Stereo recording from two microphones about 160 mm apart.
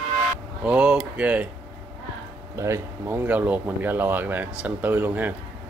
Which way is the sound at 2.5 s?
15° right (ahead or behind).